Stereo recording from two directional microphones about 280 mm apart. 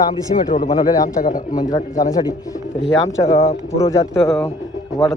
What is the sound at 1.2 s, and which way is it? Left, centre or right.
Speech, left.